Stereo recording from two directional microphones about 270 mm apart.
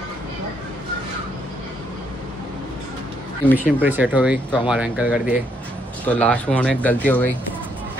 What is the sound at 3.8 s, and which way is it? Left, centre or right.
Speech, centre.